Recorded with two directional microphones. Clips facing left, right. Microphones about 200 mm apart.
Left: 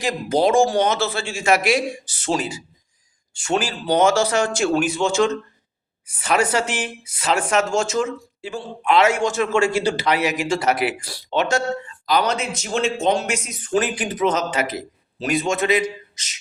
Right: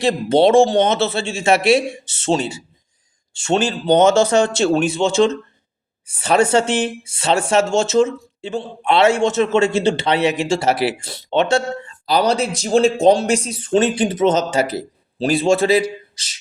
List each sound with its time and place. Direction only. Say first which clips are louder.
0.0 s speech: right 5 dB; 30° right (ahead or behind)